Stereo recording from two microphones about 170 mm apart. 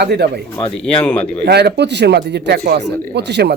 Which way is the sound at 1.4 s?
75° right (ahead or behind).